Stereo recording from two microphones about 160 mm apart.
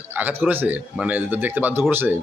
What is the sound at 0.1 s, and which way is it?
A man's voice, 10° right (ahead or behind).